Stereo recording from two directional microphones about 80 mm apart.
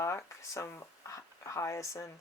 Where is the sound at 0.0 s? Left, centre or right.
Left.